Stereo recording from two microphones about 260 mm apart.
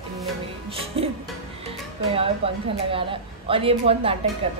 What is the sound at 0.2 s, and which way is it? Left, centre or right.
Music, right.